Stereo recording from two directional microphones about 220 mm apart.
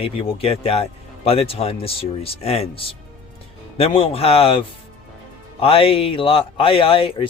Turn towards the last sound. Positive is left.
turn(degrees=25)  # may be behind; listen again after turning